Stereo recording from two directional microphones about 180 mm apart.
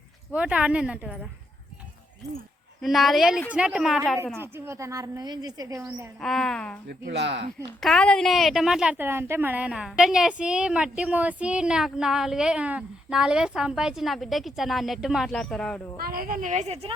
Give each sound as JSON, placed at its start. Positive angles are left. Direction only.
{"t": 0.3, "sound": "speech", "side_deg": -5}
{"t": 2.8, "sound": "a woman's voice", "side_deg": 0}
{"t": 4.4, "sound": "speech", "side_deg": -15}
{"t": 6.2, "sound": "a woman's voice", "side_deg": 0}
{"t": 7.0, "sound": "speech", "side_deg": -70}
{"t": 7.8, "sound": "a woman's voice", "side_deg": 0}
{"t": 16.0, "sound": "a woman's voice", "side_deg": -55}